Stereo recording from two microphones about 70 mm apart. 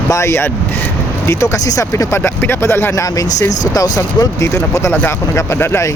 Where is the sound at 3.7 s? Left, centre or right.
Left.